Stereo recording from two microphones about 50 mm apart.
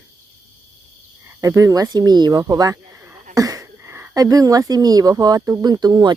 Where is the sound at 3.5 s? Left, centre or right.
Right.